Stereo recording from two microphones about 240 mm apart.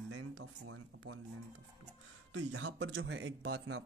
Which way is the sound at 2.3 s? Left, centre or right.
Right.